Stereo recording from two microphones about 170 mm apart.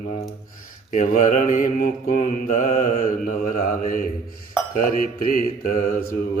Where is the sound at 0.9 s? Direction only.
50° left (ahead or behind).